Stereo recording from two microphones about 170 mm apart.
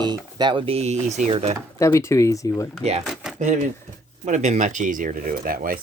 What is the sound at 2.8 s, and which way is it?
Speech, 40° right (ahead or behind).